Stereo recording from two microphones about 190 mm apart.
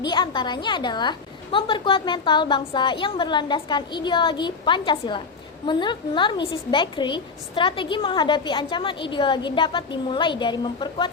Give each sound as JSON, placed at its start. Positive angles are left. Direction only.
{"t": 0.0, "sound": "a woman's voice", "side_deg": 25}